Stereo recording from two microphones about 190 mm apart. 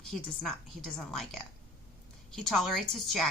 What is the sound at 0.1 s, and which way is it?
A woman's voice, centre (ahead or behind).